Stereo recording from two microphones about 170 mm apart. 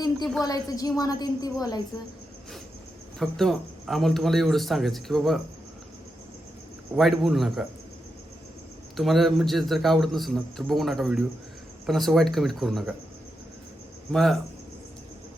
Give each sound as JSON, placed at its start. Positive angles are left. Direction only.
{"t": 0.4, "sound": "a woman's voice", "side_deg": 20}
{"t": 3.2, "sound": "a man's voice", "side_deg": 0}
{"t": 6.9, "sound": "a man's voice", "side_deg": 0}
{"t": 9.0, "sound": "a man's voice", "side_deg": 0}
{"t": 14.1, "sound": "a man's voice", "side_deg": 0}